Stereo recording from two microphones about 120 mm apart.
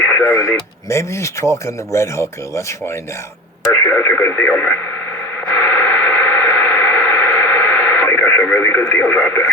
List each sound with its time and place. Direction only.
0.1 s speech: 25° left (ahead or behind)
3.8 s speech: 15° left (ahead or behind)
5.5 s radio: 15° left (ahead or behind)